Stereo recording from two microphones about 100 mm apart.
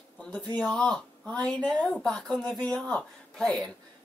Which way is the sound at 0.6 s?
5° left (ahead or behind).